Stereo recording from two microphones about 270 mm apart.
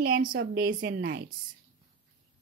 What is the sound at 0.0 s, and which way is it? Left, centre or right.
Speech, right.